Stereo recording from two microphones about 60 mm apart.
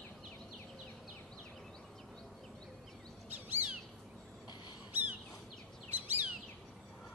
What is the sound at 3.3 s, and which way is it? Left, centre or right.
Bird vocalization, right.